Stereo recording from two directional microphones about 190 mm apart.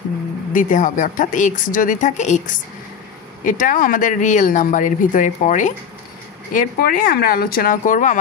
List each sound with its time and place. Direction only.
0.5 s speech: 45° left (ahead or behind)